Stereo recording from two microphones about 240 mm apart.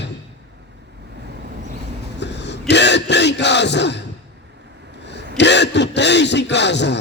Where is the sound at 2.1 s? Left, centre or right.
Left.